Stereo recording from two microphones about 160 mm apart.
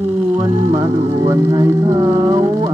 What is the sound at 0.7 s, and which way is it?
Music, 20° right (ahead or behind).